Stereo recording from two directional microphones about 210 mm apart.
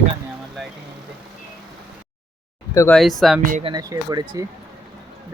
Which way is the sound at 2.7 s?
10° left (ahead or behind).